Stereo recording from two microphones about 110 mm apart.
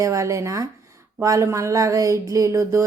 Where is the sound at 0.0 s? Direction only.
30° right (ahead or behind).